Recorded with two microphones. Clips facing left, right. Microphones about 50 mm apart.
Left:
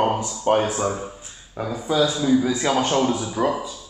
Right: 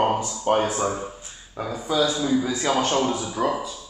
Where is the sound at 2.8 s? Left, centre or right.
Centre.